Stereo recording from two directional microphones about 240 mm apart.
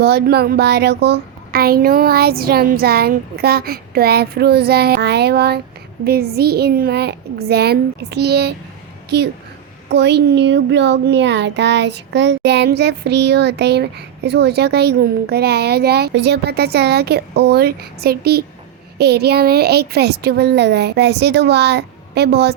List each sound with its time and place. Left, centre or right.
0.0 s a child's voice: right